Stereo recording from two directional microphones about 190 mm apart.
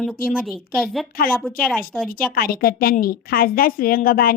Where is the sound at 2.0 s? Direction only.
50° left (ahead or behind).